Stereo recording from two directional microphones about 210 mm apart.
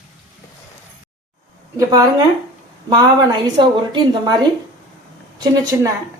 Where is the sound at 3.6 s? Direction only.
20° right (ahead or behind).